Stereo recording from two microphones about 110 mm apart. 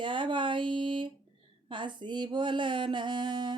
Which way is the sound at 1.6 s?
45° right (ahead or behind).